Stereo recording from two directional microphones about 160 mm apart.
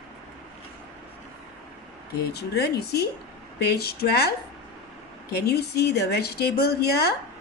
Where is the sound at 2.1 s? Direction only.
85° left.